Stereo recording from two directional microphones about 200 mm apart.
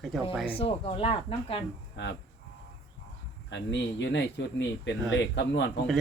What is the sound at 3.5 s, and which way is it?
Speech, 60° left (ahead or behind).